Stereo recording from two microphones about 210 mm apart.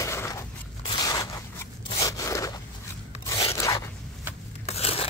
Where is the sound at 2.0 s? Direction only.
15° left (ahead or behind).